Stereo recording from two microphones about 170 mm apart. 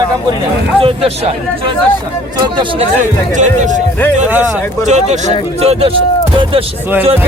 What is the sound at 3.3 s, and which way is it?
Speech, 45° right (ahead or behind).